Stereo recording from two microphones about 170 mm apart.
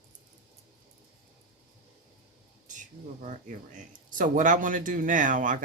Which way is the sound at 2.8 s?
45° right (ahead or behind).